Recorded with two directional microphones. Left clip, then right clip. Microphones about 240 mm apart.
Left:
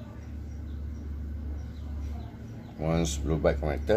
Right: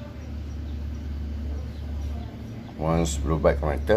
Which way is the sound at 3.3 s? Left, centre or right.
Centre.